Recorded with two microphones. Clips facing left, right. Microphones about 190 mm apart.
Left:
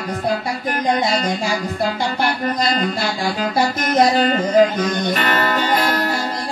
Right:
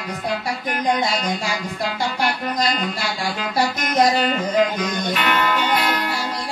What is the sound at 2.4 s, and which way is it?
Speech, 40° left (ahead or behind).